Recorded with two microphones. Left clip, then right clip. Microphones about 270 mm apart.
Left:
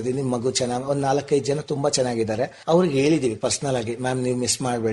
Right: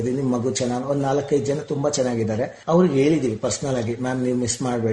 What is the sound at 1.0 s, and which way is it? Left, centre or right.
Speech, left.